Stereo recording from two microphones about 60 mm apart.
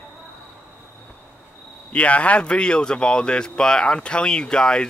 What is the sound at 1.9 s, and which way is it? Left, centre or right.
Speech, left.